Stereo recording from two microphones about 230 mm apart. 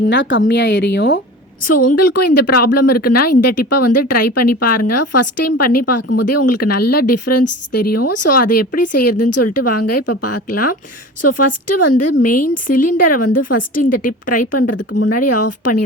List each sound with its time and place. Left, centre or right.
0.1 s speech: left
1.6 s speech: left
14.8 s speech: left
15.1 s speech: left